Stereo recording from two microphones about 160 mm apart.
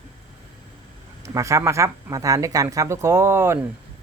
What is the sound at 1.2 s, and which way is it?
Speech, 20° right (ahead or behind).